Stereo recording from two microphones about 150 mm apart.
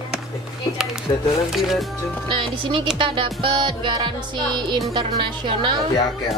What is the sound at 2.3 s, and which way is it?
A woman's voice, 35° right (ahead or behind).